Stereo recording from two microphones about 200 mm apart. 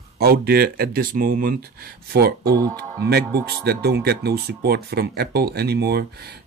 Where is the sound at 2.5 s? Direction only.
20° right (ahead or behind).